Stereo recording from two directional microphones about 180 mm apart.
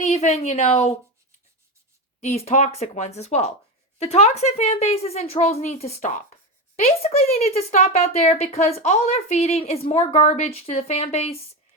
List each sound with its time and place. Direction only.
0.0 s speech: 40° left (ahead or behind)
2.2 s speech: 35° left (ahead or behind)